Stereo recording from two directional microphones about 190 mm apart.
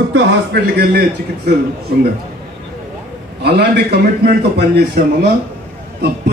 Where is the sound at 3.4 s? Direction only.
65° right (ahead or behind).